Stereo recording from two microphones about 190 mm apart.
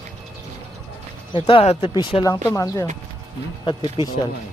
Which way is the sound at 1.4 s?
30° left (ahead or behind).